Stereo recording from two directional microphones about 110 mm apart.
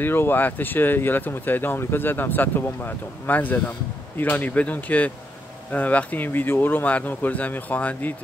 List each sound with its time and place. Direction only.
0.0 s speech: 20° left (ahead or behind)